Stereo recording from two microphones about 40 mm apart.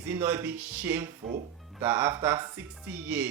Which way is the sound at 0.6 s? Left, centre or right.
Right.